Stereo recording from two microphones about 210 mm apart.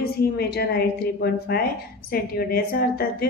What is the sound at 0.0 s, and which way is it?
A woman's voice, 50° left (ahead or behind).